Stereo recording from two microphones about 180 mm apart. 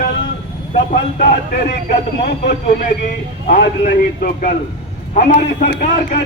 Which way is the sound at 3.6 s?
65° left (ahead or behind).